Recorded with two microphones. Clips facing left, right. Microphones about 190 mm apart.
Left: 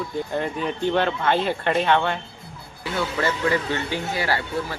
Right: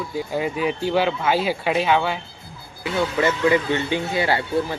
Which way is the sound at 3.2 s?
20° right (ahead or behind).